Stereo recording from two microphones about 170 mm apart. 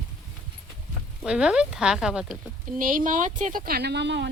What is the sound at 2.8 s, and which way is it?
A woman's voice, 50° right (ahead or behind).